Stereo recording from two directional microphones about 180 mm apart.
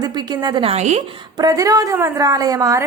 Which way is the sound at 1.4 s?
20° right (ahead or behind).